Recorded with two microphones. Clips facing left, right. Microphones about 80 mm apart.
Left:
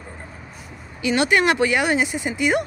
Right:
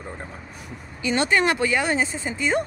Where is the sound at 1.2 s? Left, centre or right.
Centre.